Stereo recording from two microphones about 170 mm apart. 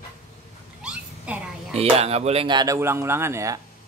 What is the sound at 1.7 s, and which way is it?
A man's voice, 35° right (ahead or behind).